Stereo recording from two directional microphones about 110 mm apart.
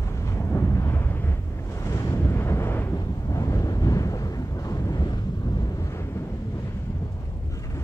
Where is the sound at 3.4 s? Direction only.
30° left (ahead or behind).